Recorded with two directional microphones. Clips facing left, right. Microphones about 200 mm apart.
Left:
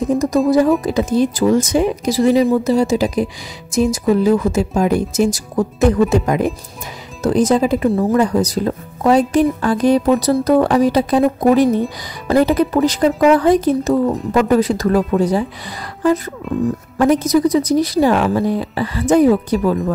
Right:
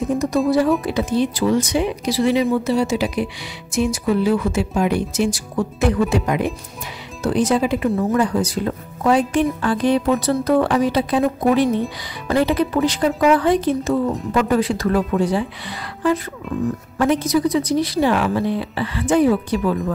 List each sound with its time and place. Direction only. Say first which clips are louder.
0.1 s speech: left 4 dB; 40° left (ahead or behind)
17.0 s speech: left 4 dB; 40° left (ahead or behind)